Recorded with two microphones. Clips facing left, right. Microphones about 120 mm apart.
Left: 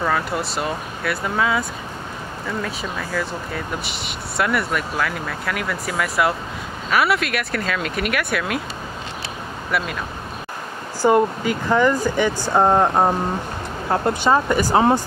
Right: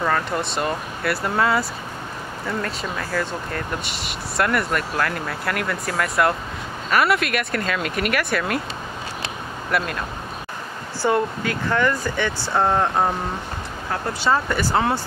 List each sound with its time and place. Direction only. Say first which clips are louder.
0.0 s speech: even; 5° left (ahead or behind)
9.7 s speech: right 1 dB; centre (ahead or behind)
11.1 s speech: left 4 dB; 10° left (ahead or behind)
14.2 s speech: even; 15° left (ahead or behind)